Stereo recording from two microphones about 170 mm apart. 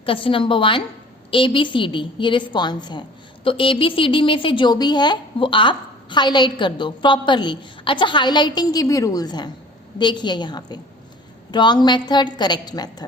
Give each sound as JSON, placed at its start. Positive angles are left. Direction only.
{"t": 0.0, "sound": "a woman's voice", "side_deg": 30}